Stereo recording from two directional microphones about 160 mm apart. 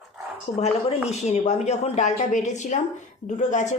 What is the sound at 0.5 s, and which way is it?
Speech, 45° left (ahead or behind).